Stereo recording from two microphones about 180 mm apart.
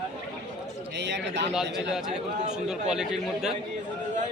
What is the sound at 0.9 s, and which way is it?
Speech, 75° right (ahead or behind).